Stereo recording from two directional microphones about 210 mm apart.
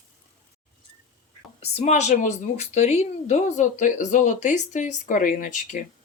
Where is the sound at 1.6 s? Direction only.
30° left (ahead or behind).